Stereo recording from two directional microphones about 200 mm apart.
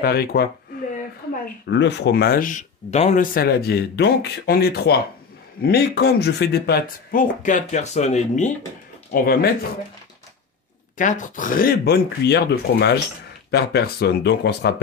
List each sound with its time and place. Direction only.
0.0 s speech: 50° left (ahead or behind)
1.7 s speech: 60° left (ahead or behind); by 8.5 s 35° left (ahead or behind)
9.1 s speech: 50° left (ahead or behind)
11.0 s speech: 40° left (ahead or behind); by 14.7 s 60° left (ahead or behind)